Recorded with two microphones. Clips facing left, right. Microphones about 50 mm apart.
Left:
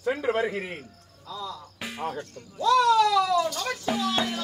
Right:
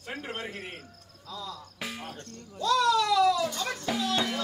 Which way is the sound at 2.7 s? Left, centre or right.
Left.